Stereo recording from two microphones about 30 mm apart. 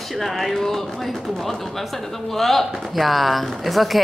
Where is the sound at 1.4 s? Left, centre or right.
Centre.